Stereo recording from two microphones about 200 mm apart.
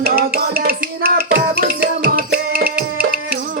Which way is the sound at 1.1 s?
50° right (ahead or behind).